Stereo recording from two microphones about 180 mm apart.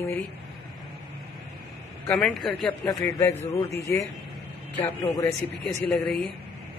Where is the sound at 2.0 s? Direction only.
5° left (ahead or behind).